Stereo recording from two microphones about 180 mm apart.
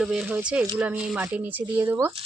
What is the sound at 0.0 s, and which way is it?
Speech, 5° right (ahead or behind).